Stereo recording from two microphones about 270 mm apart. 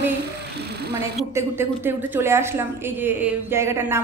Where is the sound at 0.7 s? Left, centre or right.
Right.